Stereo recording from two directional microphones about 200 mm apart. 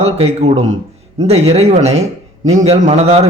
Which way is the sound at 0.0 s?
30° right (ahead or behind).